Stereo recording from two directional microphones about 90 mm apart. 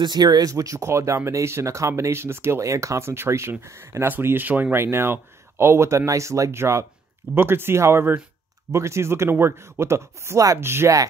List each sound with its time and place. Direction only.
0.0 s speech: 50° right (ahead or behind); by 11.0 s 30° right (ahead or behind)